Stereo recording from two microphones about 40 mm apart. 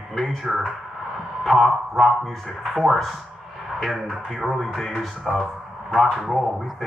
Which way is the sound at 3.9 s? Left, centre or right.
Centre.